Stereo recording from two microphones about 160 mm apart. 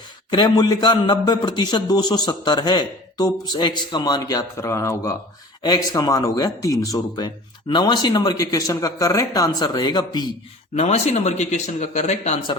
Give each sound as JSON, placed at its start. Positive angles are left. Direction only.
{"t": 0.3, "sound": "a man's voice", "side_deg": 25}
{"t": 10.8, "sound": "speech", "side_deg": 40}